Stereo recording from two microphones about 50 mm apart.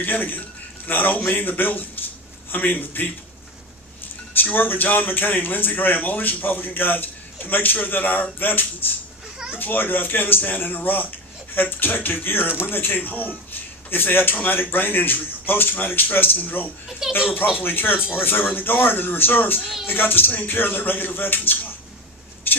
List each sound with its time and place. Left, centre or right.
0.0 s speech: left
4.4 s speech: left
17.0 s speech: centre
17.6 s speech: left
19.6 s speech: centre
19.9 s speech: left
22.5 s a sound: left